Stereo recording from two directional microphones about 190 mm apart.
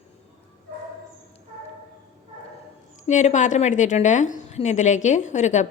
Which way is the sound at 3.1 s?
40° left (ahead or behind).